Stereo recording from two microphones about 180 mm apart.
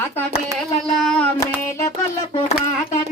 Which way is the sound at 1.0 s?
5° left (ahead or behind).